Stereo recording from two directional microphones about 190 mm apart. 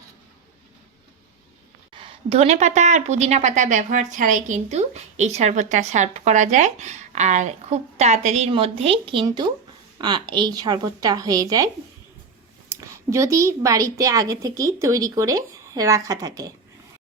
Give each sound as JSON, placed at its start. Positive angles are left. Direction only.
{"t": 1.9, "sound": "a woman's voice", "side_deg": -30}